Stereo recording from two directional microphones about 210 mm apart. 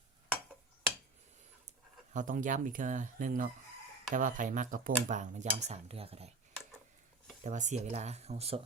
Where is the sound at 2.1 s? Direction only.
35° right (ahead or behind).